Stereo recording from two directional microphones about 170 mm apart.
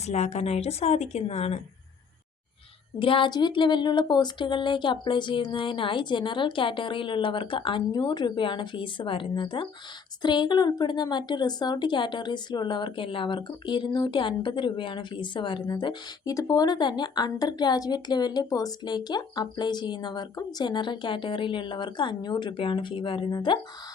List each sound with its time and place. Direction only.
0.1 s speech: 40° left (ahead or behind)
3.0 s a woman's voice: 30° left (ahead or behind)